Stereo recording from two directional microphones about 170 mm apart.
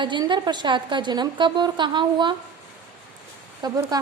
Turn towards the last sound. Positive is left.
turn(degrees=-25)  # may be behind; listen again after turning